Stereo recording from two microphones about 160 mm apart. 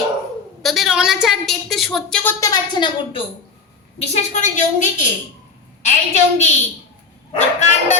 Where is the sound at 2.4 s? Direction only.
20° left (ahead or behind).